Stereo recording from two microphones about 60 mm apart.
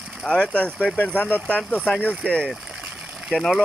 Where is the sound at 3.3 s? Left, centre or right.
Centre.